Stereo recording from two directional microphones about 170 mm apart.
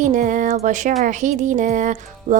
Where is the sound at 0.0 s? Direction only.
50° right (ahead or behind).